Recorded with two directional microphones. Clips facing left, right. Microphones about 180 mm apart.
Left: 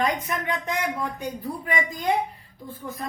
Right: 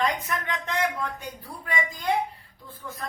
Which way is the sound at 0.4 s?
15° left (ahead or behind).